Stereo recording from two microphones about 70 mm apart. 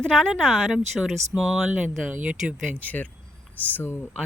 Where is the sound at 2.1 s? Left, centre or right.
Right.